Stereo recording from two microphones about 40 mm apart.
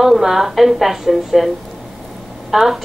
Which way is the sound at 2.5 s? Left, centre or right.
Centre.